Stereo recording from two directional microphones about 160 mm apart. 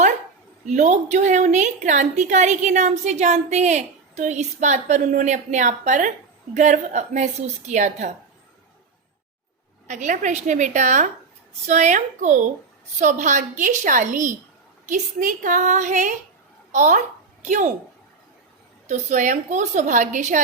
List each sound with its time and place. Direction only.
0.6 s a woman's voice: 45° right (ahead or behind)
9.8 s a woman's voice: 50° right (ahead or behind)
18.9 s a woman's voice: 50° right (ahead or behind)